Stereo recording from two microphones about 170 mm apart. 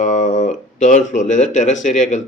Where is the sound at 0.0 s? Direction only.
45° left (ahead or behind).